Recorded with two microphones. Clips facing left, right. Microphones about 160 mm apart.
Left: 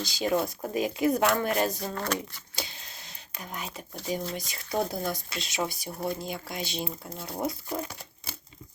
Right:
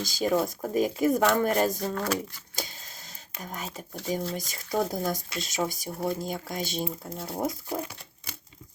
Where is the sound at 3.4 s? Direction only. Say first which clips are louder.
Right 1 dB; 45° right (ahead or behind).